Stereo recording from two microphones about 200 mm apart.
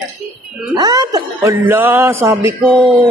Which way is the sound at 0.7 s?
20° right (ahead or behind).